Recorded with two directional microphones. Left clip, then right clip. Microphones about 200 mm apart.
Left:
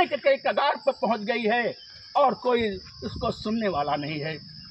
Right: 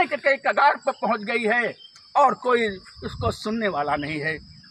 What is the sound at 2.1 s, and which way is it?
A man's voice, centre (ahead or behind).